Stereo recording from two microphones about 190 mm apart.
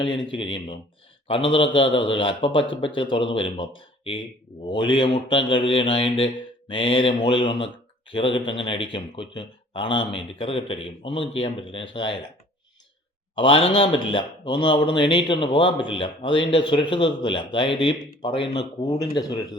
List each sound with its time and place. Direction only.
0.1 s a man's voice: 25° left (ahead or behind)
4.7 s a man's voice: 25° left (ahead or behind)
13.3 s a man's voice: 30° left (ahead or behind)